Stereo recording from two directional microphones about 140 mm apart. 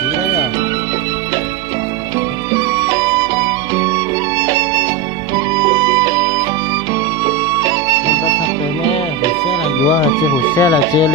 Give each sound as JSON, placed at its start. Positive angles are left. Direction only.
{"t": 2.5, "sound": "music", "side_deg": -25}
{"t": 10.5, "sound": "speech", "side_deg": 25}